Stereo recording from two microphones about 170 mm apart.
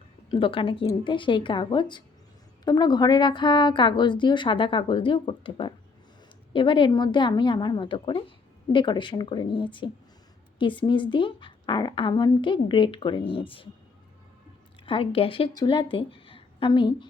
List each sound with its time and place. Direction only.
0.3 s a woman's voice: 30° left (ahead or behind)
14.8 s a woman's voice: 35° left (ahead or behind)